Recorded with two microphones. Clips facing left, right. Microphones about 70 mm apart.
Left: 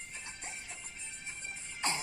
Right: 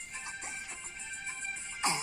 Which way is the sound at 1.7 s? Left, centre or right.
Right.